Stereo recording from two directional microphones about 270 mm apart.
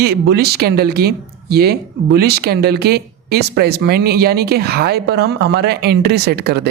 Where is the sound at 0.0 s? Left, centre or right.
Right.